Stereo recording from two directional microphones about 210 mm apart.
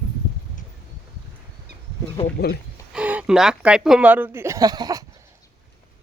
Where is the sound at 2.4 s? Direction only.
50° left (ahead or behind).